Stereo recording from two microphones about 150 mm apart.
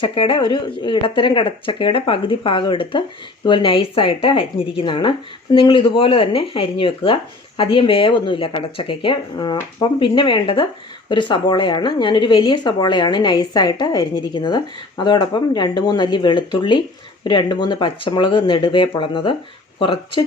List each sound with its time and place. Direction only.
0.0 s speech: 35° left (ahead or behind)